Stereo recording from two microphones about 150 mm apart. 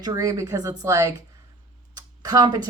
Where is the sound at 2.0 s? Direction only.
25° right (ahead or behind).